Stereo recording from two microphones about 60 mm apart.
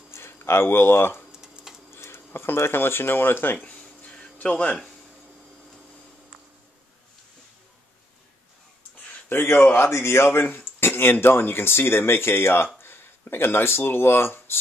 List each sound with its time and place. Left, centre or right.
0.1 s speech: left
1.3 s typing: centre
2.0 s speech: left
3.6 s a sound: left
9.3 s speech: left
9.6 s speech: left
9.8 s speech: left